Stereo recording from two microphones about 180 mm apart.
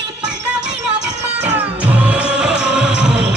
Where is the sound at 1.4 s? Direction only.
10° right (ahead or behind).